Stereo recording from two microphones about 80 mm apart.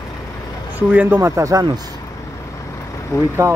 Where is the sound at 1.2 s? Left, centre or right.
Right.